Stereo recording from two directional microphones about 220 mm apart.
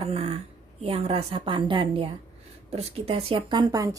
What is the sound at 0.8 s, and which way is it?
A woman's voice, 25° right (ahead or behind).